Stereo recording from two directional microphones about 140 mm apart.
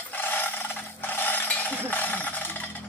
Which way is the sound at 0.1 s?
15° left (ahead or behind).